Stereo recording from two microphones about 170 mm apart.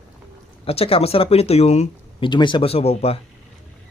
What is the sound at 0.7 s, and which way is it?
Speech, 35° left (ahead or behind).